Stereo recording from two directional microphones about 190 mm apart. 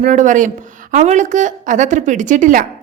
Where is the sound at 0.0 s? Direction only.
40° right (ahead or behind).